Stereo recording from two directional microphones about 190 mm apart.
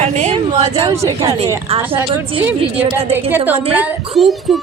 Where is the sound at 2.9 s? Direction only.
10° right (ahead or behind).